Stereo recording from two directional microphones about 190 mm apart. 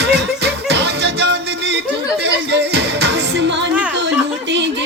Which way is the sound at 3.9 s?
70° right (ahead or behind).